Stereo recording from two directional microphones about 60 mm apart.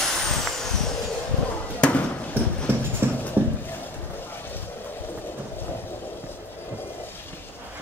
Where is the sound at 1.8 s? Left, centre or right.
Centre.